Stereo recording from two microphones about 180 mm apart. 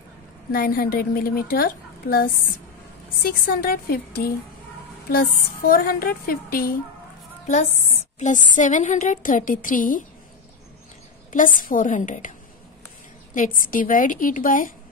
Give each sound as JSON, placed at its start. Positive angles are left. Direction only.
{"t": 0.5, "sound": "a woman's voice", "side_deg": 55}
{"t": 8.2, "sound": "a woman's voice", "side_deg": 45}
{"t": 11.3, "sound": "a woman's voice", "side_deg": 50}